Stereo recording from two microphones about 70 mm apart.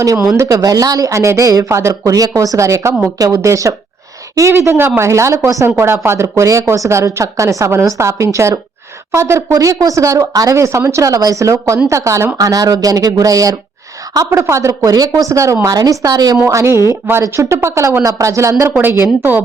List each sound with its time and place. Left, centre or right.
0.3 s speech: right
5.6 s speech: right
6.2 s speech: right
12.4 s speech: right
14.3 s speech: right
14.9 s speech: right
15.6 s speech: right
16.5 s speech: right